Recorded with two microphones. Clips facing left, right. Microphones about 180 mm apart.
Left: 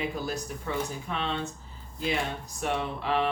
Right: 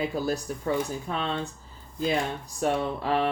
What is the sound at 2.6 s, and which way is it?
Speech, 40° right (ahead or behind).